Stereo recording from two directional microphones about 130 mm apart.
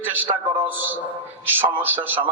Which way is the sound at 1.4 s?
15° right (ahead or behind).